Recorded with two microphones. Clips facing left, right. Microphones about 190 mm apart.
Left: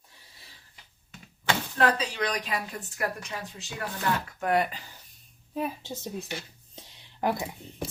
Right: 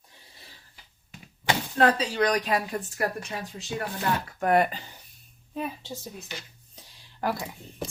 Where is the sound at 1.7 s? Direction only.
35° right (ahead or behind).